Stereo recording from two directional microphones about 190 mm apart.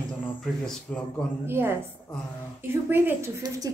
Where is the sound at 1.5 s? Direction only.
10° right (ahead or behind).